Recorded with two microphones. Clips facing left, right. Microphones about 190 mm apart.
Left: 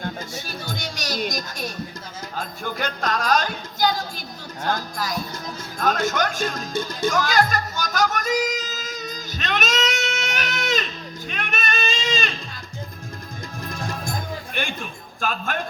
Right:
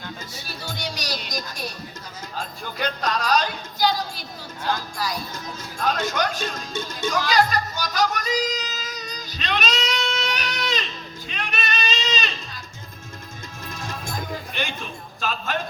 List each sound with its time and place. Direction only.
0.0 s music: 50° left (ahead or behind)
2.7 s a sound: 45° left (ahead or behind)
4.6 s music: 45° left (ahead or behind)
13.7 s music: 45° left (ahead or behind)